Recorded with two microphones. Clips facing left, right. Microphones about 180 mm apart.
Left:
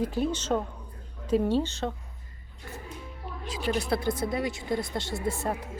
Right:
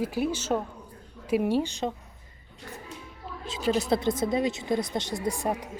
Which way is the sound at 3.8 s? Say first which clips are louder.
Right 3 dB; 20° right (ahead or behind).